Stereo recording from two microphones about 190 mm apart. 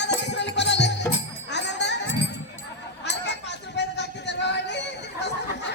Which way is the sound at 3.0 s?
65° left (ahead or behind).